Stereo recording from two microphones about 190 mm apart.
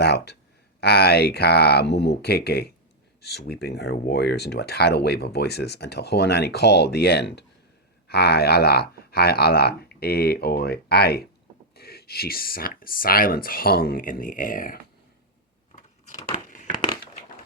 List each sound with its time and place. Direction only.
0.0 s a sound: 60° left (ahead or behind)
0.8 s speech: 60° left (ahead or behind)
16.3 s crumpling: 40° left (ahead or behind)